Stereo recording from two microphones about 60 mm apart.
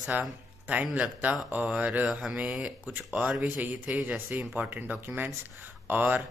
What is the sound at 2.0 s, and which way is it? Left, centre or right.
Speech, centre.